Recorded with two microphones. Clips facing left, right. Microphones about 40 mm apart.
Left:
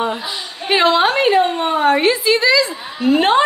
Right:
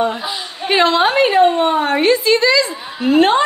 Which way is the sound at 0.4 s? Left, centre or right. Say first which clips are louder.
Right 1 dB; centre.